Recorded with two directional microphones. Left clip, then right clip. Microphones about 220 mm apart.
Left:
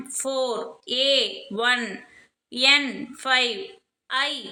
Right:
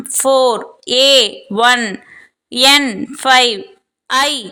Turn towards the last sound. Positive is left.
turn(degrees=-45)  # may be behind; listen again after turning